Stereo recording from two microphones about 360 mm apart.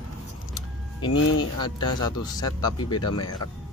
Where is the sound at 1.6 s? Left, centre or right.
Centre.